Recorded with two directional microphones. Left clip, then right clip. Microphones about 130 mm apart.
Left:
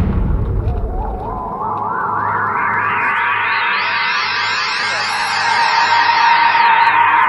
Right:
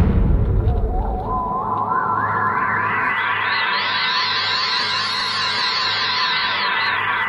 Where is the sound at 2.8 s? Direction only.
50° left (ahead or behind).